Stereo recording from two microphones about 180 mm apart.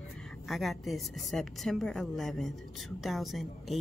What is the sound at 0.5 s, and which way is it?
A woman's voice, centre (ahead or behind).